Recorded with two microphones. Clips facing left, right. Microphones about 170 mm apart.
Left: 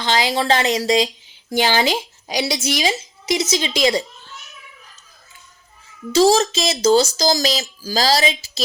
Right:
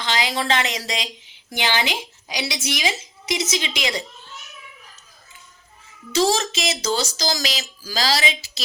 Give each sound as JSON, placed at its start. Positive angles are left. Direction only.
{"t": 0.0, "sound": "speech", "side_deg": 30}
{"t": 6.1, "sound": "speech", "side_deg": 35}